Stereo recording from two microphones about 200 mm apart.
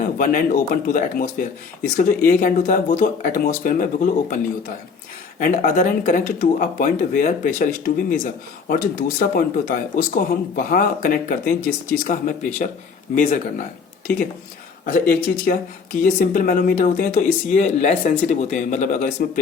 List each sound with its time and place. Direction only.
0.2 s speech: 45° left (ahead or behind)
5.4 s speech: 40° left (ahead or behind)
14.8 s speech: 45° left (ahead or behind)